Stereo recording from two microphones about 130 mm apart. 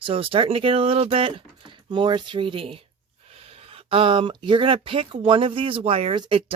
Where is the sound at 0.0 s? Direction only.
45° right (ahead or behind).